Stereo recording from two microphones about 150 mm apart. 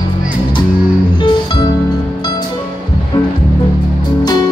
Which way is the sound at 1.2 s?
30° left (ahead or behind).